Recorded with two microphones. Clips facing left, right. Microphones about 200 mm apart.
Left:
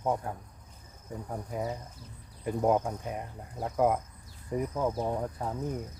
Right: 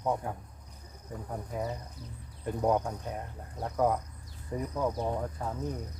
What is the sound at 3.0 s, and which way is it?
Speech, 20° left (ahead or behind).